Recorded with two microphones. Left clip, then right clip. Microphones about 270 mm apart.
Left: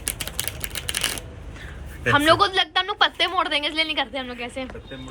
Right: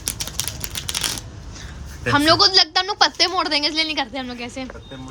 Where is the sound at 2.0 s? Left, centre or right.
Centre.